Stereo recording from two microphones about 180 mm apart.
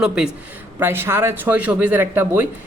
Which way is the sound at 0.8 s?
15° right (ahead or behind).